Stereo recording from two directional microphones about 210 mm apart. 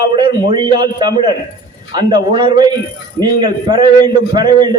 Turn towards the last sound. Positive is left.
turn(degrees=-20)  # may be behind; listen again after turning